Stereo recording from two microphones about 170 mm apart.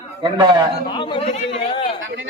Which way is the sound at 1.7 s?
30° left (ahead or behind).